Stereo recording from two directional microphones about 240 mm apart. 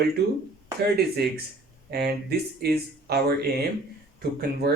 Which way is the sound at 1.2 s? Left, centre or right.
Right.